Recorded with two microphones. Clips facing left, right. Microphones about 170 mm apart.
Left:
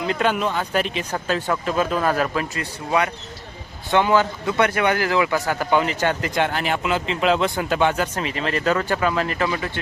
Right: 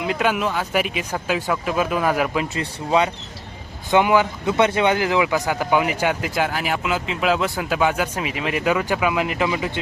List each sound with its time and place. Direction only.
0.0 s speech: 5° right (ahead or behind)